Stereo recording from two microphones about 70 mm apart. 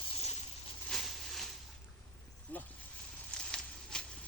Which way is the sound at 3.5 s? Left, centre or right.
Centre.